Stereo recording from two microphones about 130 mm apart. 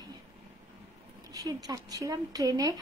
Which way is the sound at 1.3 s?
30° right (ahead or behind).